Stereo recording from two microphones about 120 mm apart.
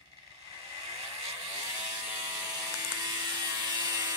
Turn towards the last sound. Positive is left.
turn(degrees=-30)  # may be behind; listen again after turning